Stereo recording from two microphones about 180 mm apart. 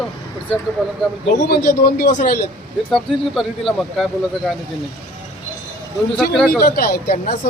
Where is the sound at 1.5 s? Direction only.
60° left (ahead or behind).